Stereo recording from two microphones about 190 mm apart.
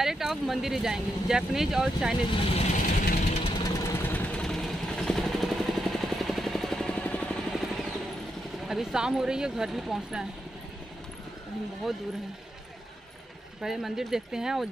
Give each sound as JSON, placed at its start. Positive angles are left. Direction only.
{"t": 0.0, "sound": "speech", "side_deg": 0}
{"t": 2.5, "sound": "vehicle", "side_deg": 40}
{"t": 3.5, "sound": "vehicle", "side_deg": 20}
{"t": 8.6, "sound": "speech", "side_deg": -5}
{"t": 13.6, "sound": "speech", "side_deg": 0}